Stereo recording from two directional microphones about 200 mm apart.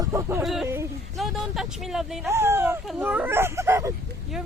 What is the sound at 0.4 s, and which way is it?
Speech, centre (ahead or behind).